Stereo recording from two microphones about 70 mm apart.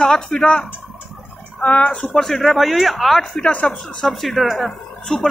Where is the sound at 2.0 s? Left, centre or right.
Centre.